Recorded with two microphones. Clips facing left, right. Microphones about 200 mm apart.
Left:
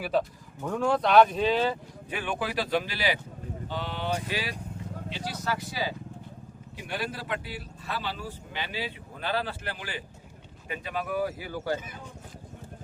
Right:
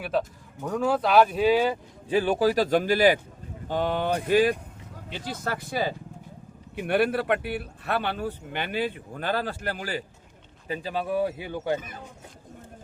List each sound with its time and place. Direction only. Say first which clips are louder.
0.6 s speech: right 1 dB; centre (ahead or behind)
2.0 s speech: right 10 dB; 35° right (ahead or behind)
10.7 s speech: right 4 dB; 30° right (ahead or behind)